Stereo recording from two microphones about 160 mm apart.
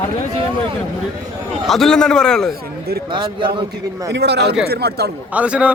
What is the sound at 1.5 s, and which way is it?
A man's voice, centre (ahead or behind).